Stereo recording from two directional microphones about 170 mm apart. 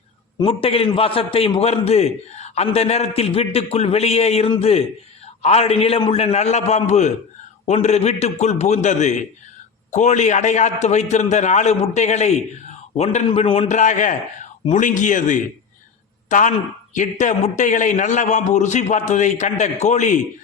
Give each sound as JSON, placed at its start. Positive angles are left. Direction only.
{"t": 0.3, "sound": "a man's voice", "side_deg": 35}